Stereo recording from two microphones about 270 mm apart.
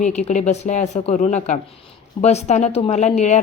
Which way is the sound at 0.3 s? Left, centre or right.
Left.